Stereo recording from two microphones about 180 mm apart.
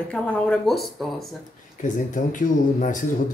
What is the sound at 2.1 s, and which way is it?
Speech, 45° left (ahead or behind).